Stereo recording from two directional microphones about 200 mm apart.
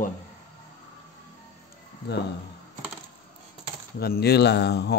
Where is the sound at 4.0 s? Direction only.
50° left (ahead or behind).